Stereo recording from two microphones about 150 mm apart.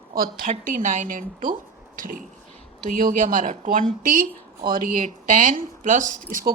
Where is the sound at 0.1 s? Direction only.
75° right (ahead or behind).